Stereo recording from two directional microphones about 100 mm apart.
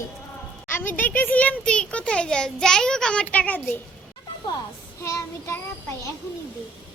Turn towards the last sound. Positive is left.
turn(degrees=30)  # may be behind; listen again after turning